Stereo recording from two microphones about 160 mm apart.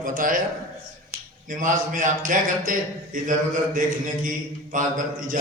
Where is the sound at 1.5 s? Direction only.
55° right (ahead or behind).